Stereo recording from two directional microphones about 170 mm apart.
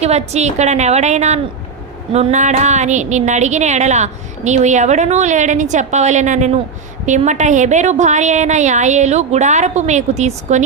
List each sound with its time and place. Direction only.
0.0 s a woman's voice: 40° right (ahead or behind)